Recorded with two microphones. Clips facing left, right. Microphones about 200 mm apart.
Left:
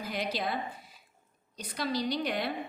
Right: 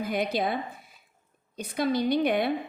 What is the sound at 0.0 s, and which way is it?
A woman's voice, 55° right (ahead or behind).